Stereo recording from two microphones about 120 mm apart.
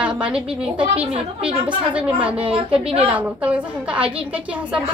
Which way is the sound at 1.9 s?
10° right (ahead or behind).